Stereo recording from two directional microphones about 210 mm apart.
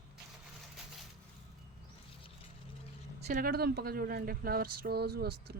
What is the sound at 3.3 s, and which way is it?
Speech, 45° right (ahead or behind).